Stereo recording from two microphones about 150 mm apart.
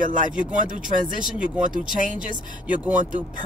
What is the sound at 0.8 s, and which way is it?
Speech, 65° right (ahead or behind).